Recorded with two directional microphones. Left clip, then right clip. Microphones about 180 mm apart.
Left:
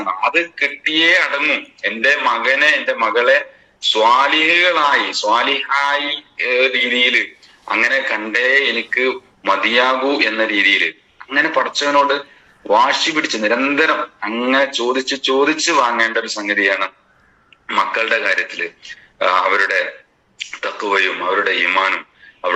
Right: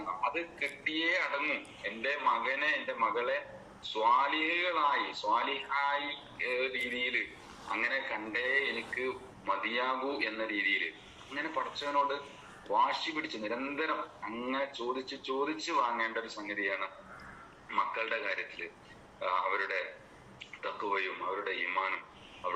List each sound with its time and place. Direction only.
0.0 s speech: 65° left (ahead or behind)